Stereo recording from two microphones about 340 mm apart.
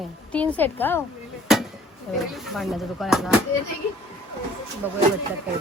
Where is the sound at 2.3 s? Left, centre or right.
Centre.